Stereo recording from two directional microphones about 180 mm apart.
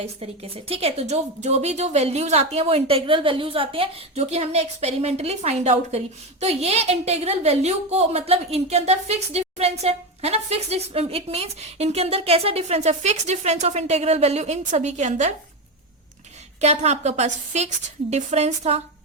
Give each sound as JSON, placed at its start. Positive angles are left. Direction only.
{"t": 0.0, "sound": "a woman's voice", "side_deg": -35}
{"t": 16.6, "sound": "a woman's voice", "side_deg": -35}